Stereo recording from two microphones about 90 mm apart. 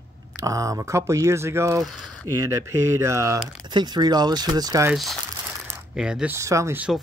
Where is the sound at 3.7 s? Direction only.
50° right (ahead or behind).